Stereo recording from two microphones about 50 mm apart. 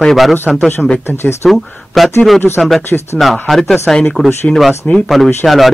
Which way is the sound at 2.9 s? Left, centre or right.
Left.